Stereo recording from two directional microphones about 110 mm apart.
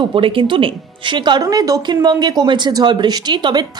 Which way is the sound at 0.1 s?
50° right (ahead or behind).